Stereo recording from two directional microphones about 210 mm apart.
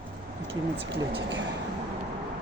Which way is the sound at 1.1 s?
55° right (ahead or behind).